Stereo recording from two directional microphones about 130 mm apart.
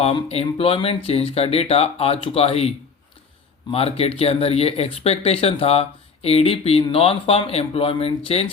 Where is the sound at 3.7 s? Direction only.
50° left (ahead or behind).